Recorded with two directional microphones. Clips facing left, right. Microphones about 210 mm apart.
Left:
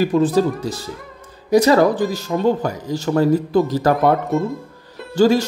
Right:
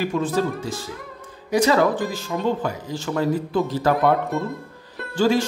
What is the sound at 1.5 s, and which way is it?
Speech, 40° left (ahead or behind).